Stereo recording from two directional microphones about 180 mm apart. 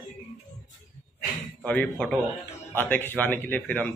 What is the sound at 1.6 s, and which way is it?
Speech, 5° left (ahead or behind).